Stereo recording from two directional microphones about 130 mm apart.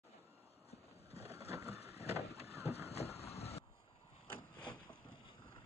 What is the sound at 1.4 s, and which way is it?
Vehicle, 55° left (ahead or behind).